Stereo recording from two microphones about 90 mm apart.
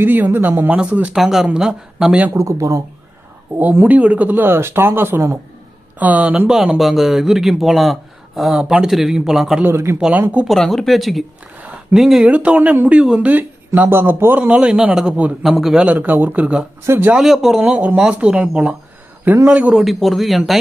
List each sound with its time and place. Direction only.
0.0 s speech: 20° right (ahead or behind)
1.1 s speech: 5° right (ahead or behind)
2.3 s speech: 35° right (ahead or behind)
3.5 s speech: 20° right (ahead or behind)
9.6 s speech: 25° right (ahead or behind)
9.9 s speech: 10° right (ahead or behind)
10.5 s speech: centre (ahead or behind)
11.5 s a sound: 15° right (ahead or behind)
12.0 s speech: 5° right (ahead or behind)
12.3 s speech: 15° right (ahead or behind)
16.8 s speech: 25° right (ahead or behind)
17.1 s speech: 5° right (ahead or behind)
19.8 s speech: centre (ahead or behind)